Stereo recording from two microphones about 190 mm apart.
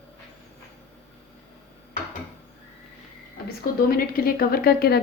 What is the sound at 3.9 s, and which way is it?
A woman's voice, 50° left (ahead or behind).